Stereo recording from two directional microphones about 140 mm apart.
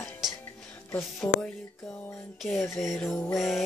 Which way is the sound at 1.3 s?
5° left (ahead or behind).